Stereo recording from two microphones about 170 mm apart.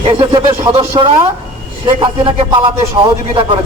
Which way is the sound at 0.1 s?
30° right (ahead or behind).